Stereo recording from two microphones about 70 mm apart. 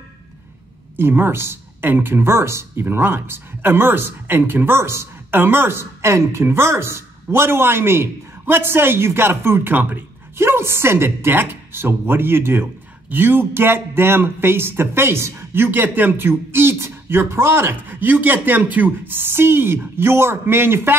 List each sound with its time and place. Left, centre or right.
0.9 s a woman's voice: right